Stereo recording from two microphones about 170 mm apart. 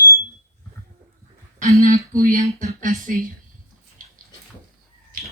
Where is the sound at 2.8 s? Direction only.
50° right (ahead or behind).